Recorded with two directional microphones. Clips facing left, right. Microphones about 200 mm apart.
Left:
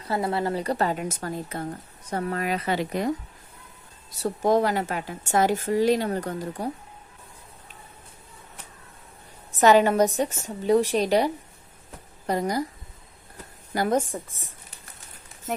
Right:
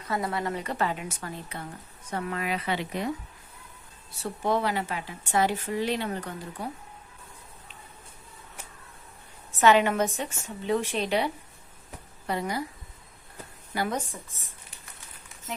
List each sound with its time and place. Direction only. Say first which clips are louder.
0.0 s speech: left 4 dB; 30° left (ahead or behind)
4.1 s speech: left 6 dB; 40° left (ahead or behind)
9.6 s speech: left 4 dB; 40° left (ahead or behind)
13.7 s speech: left 7 dB; 45° left (ahead or behind)